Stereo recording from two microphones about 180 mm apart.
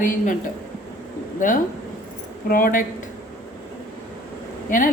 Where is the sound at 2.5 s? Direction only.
50° left (ahead or behind).